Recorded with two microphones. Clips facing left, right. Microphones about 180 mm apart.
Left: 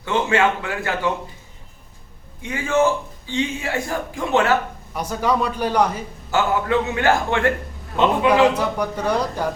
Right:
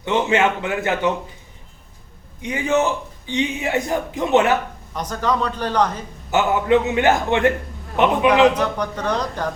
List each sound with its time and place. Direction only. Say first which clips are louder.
0.0 s speech: right 1 dB; 20° right (ahead or behind)
2.4 s speech: even; 20° right (ahead or behind)
4.9 s a man's voice: left 1 dB; 10° left (ahead or behind)
6.3 s speech: right 3 dB; 20° right (ahead or behind)
8.5 s a man's voice: even; 10° left (ahead or behind)